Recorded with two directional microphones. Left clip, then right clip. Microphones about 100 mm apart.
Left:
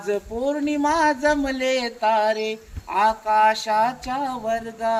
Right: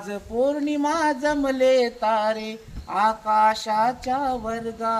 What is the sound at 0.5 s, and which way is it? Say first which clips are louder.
Speech: left 2 dB; 30° right (ahead or behind).